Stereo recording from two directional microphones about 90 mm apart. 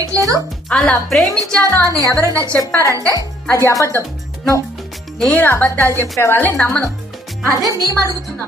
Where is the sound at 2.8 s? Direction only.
40° right (ahead or behind).